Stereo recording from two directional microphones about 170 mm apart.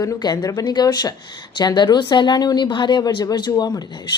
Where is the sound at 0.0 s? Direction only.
20° left (ahead or behind).